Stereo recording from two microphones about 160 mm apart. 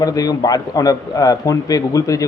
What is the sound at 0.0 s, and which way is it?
A man's voice, 25° left (ahead or behind).